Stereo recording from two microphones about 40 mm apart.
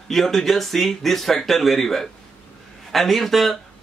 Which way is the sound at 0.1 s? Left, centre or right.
Centre.